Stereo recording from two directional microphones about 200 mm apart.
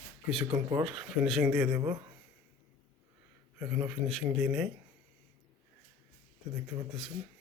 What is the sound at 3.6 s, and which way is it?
A man's voice, centre (ahead or behind).